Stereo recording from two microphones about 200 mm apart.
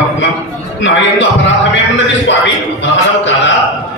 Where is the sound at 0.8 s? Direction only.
65° left (ahead or behind).